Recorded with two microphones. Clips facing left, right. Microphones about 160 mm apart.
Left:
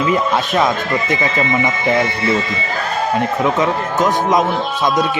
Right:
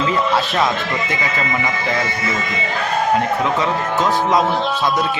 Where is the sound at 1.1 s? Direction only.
25° left (ahead or behind).